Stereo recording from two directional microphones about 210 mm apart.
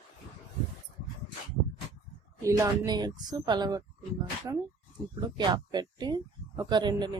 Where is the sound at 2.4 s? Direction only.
15° right (ahead or behind).